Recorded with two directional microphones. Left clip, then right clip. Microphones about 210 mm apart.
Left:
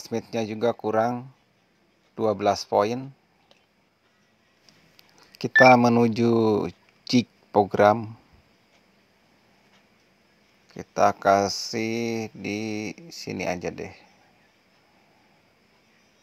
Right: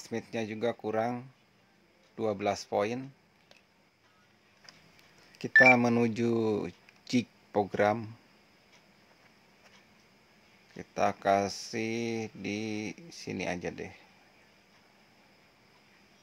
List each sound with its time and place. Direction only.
0.0 s speech: 25° left (ahead or behind)
4.9 s telephone dialing: 30° left (ahead or behind)
5.6 s speech: 25° left (ahead or behind)
10.8 s speech: 30° left (ahead or behind)